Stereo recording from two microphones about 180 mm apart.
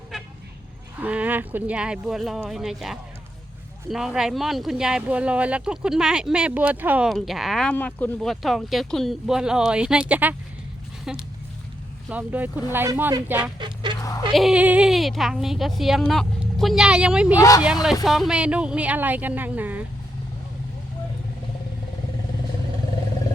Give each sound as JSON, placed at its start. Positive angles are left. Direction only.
{"t": 0.9, "sound": "speech", "side_deg": -10}
{"t": 12.0, "sound": "a woman's voice", "side_deg": -10}
{"t": 13.6, "sound": "speech", "side_deg": -25}
{"t": 14.3, "sound": "speech", "side_deg": -5}
{"t": 17.3, "sound": "speech", "side_deg": 20}
{"t": 18.0, "sound": "a woman's voice", "side_deg": 0}